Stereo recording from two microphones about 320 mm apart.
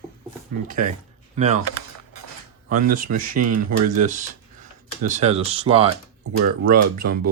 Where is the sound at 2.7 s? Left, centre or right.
Right.